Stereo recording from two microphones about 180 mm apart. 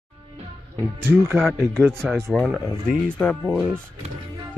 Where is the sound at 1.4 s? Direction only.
5° left (ahead or behind).